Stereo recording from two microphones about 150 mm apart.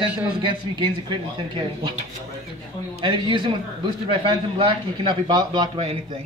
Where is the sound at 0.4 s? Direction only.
35° right (ahead or behind).